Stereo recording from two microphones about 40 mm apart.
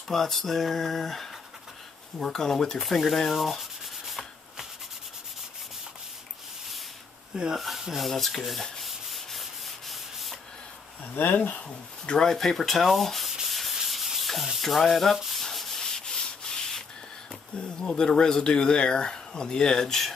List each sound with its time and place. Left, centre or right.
0.1 s speech: centre
4.1 s rub: centre
7.5 s speech: centre
8.7 s rub: centre
11.1 s speech: left
12.3 s speech: centre
13.5 s sanding: centre
14.6 s speech: centre
15.5 s sanding: centre
15.8 s sanding: centre
17.6 s speech: centre